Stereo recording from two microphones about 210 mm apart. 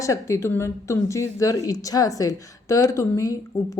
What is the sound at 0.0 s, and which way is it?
A woman's voice, 15° left (ahead or behind).